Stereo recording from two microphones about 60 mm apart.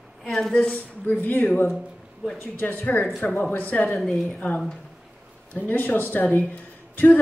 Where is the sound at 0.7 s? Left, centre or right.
Left.